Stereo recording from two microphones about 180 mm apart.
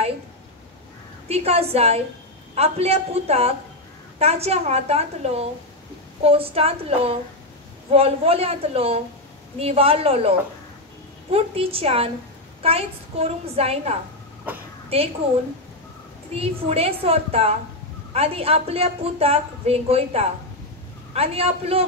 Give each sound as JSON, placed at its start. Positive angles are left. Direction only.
{"t": 1.3, "sound": "a woman's voice", "side_deg": -35}
{"t": 11.3, "sound": "a woman's voice", "side_deg": -35}
{"t": 14.5, "sound": "a child's voice", "side_deg": -10}
{"t": 14.9, "sound": "a woman's voice", "side_deg": -35}
{"t": 16.3, "sound": "a woman's voice", "side_deg": -35}